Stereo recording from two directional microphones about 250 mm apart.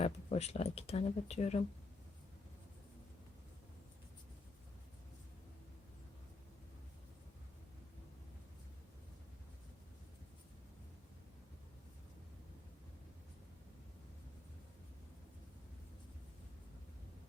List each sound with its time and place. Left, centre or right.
0.0 s speech: left